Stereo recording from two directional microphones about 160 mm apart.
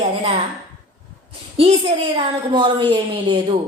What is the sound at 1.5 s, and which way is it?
A woman's voice, 35° right (ahead or behind).